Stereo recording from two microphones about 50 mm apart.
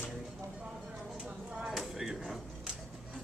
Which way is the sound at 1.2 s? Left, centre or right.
Right.